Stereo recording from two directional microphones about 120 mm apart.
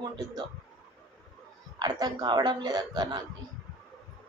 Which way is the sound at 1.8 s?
35° right (ahead or behind).